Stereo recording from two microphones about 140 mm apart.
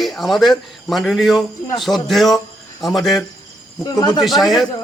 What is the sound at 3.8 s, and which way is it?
Speech, 30° left (ahead or behind).